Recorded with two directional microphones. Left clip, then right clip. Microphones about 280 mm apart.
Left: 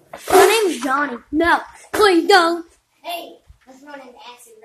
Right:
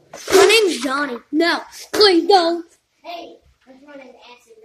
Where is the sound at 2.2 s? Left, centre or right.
Left.